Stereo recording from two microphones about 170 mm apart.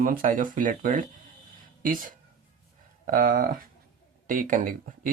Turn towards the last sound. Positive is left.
turn(degrees=-55)  # may be behind; listen again after turning